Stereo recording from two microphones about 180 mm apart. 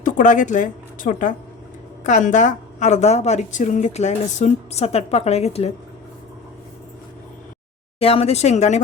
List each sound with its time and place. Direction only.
0.0 s a woman's voice: 45° left (ahead or behind)
7.9 s a woman's voice: 35° left (ahead or behind)